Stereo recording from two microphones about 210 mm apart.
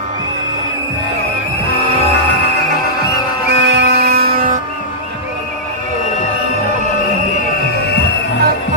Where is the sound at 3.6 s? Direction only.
55° right (ahead or behind).